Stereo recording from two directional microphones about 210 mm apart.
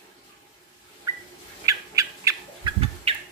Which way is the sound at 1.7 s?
15° right (ahead or behind).